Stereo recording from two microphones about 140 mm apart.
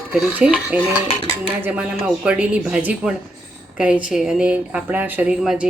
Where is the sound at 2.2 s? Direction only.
5° right (ahead or behind).